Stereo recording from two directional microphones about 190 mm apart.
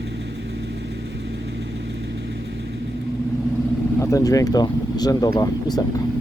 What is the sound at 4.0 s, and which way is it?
Speech, 15° left (ahead or behind).